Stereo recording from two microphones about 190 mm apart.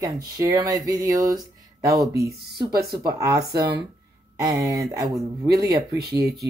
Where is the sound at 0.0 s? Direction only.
20° right (ahead or behind).